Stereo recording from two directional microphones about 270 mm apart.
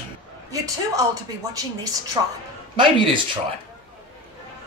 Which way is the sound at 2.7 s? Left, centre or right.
Centre.